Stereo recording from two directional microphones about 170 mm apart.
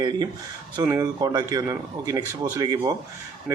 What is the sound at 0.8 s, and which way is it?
Speech, 20° right (ahead or behind).